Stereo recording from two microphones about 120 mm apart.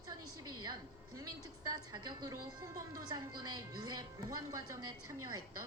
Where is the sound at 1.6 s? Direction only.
35° right (ahead or behind).